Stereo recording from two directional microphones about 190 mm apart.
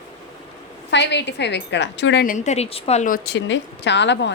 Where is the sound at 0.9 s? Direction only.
65° left (ahead or behind).